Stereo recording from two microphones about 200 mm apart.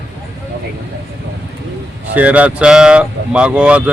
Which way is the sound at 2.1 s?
5° right (ahead or behind).